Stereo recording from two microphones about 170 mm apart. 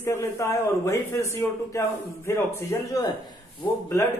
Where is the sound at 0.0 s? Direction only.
15° left (ahead or behind).